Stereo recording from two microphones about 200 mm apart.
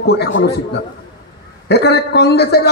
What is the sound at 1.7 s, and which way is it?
A man's voice, 55° left (ahead or behind).